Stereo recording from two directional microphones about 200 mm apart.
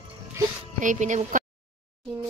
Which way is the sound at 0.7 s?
40° right (ahead or behind).